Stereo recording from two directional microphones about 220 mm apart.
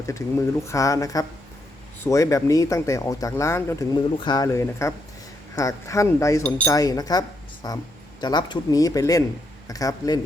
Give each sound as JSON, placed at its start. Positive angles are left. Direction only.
{"t": 0.1, "sound": "speech", "side_deg": 15}